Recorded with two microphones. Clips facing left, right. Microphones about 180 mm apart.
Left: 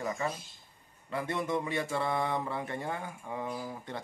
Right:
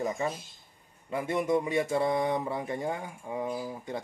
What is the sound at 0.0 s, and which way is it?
Speech, 20° right (ahead or behind).